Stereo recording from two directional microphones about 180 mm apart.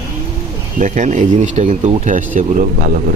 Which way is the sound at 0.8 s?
45° right (ahead or behind).